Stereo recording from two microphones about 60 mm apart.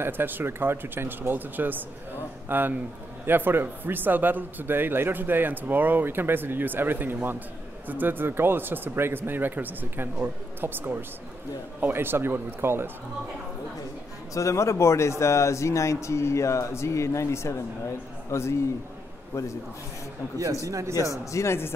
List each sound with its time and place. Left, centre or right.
0.0 s a man's voice: right
14.3 s a man's voice: left
20.3 s speech: right
21.3 s a man's voice: left